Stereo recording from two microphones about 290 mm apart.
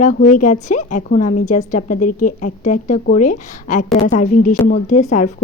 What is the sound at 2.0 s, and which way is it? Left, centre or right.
Speech, left.